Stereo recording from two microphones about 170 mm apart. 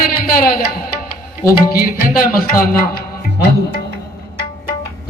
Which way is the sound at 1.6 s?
60° left (ahead or behind).